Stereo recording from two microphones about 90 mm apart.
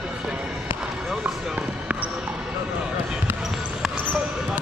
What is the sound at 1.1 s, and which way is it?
Basketball bounce, 15° right (ahead or behind).